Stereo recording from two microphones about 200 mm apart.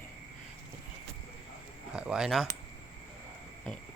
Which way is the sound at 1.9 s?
5° right (ahead or behind).